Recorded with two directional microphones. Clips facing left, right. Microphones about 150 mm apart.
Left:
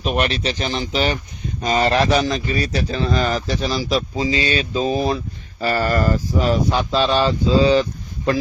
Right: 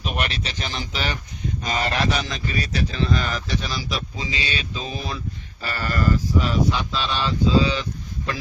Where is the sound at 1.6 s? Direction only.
35° left (ahead or behind).